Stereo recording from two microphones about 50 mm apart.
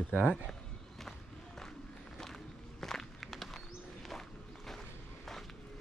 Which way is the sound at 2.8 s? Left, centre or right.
Centre.